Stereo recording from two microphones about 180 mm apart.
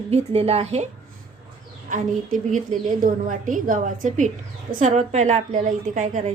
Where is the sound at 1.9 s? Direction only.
45° right (ahead or behind).